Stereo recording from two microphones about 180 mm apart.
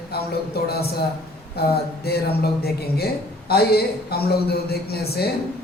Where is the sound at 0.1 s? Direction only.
60° left (ahead or behind).